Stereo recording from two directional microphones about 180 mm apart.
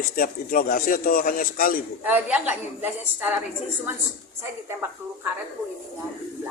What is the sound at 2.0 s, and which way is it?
A woman's voice, 10° right (ahead or behind).